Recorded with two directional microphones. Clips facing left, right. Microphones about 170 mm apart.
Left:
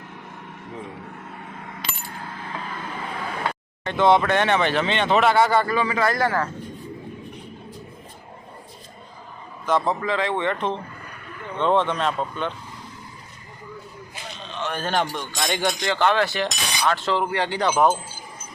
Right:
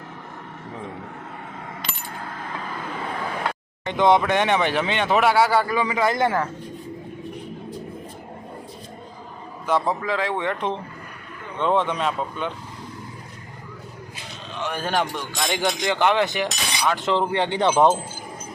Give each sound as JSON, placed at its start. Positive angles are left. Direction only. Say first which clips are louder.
{"t": 3.8, "sound": "speech", "louder": "even", "side_deg": -15}
{"t": 9.6, "sound": "speech", "louder": "even", "side_deg": -10}
{"t": 14.5, "sound": "speech", "louder": "even", "side_deg": -10}
{"t": 15.8, "sound": "speech", "louder": "right 1 dB", "side_deg": -15}